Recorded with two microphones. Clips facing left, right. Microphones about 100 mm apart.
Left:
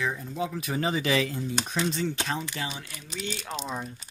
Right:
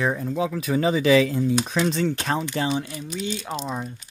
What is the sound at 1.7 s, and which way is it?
Speech, 80° right.